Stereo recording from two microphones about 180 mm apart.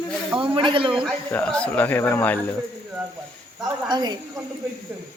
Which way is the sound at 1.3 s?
5° left (ahead or behind).